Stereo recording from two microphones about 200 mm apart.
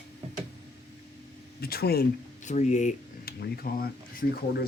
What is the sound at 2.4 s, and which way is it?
Speech, 35° left (ahead or behind).